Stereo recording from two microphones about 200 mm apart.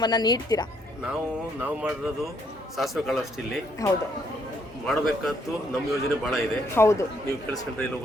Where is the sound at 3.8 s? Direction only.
15° left (ahead or behind).